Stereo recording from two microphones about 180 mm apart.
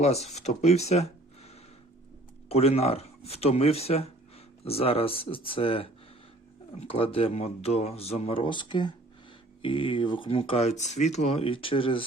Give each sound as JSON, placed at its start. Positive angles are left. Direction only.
{"t": 0.0, "sound": "speech", "side_deg": 35}
{"t": 2.5, "sound": "speech", "side_deg": 35}